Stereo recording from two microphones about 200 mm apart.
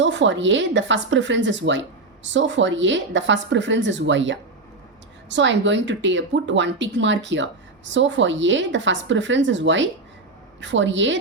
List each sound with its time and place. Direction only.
0.0 s speech: 65° right (ahead or behind)